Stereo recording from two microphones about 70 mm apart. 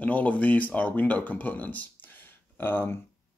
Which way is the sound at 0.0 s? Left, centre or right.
Centre.